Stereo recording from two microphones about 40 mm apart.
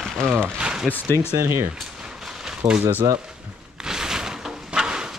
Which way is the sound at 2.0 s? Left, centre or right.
Centre.